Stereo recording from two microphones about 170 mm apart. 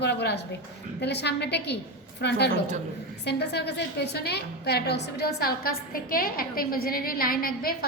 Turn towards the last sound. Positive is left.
turn(degrees=60)  # may be behind; listen again after turning